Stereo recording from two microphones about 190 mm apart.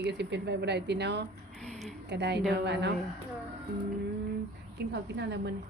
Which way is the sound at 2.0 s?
65° right (ahead or behind).